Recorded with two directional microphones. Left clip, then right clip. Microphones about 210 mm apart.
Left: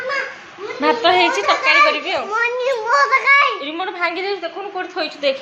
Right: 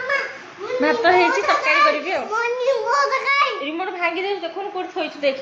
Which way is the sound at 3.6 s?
15° right (ahead or behind).